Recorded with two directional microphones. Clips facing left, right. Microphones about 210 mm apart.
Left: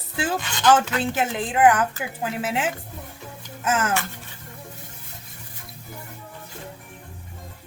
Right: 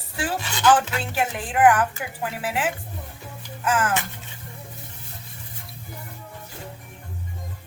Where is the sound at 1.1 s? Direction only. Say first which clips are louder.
Left 1 dB; 20° left (ahead or behind).